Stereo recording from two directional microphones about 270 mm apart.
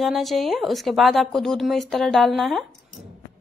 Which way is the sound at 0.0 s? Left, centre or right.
Centre.